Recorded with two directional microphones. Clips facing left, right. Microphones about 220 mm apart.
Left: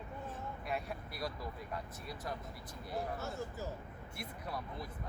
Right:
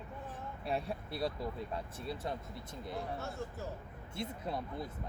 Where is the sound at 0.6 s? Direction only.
30° right (ahead or behind).